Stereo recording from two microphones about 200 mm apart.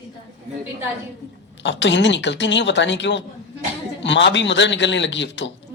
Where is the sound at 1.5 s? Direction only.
65° left (ahead or behind).